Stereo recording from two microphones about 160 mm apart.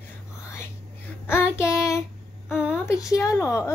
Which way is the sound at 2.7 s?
20° left (ahead or behind).